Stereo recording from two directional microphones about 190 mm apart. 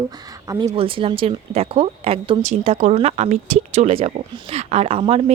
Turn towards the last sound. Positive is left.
turn(degrees=-30)  # may be behind; listen again after turning